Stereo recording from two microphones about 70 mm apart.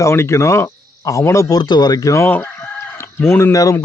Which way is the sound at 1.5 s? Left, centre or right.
Left.